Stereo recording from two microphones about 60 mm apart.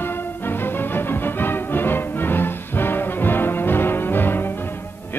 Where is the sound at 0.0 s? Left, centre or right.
Left.